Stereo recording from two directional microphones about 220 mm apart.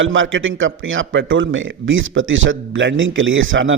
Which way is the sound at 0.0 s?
60° right (ahead or behind).